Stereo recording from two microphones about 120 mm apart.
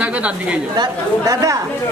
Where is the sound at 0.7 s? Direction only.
30° right (ahead or behind).